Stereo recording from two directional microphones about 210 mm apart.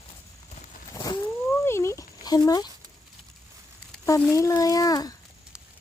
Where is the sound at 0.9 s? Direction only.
20° left (ahead or behind).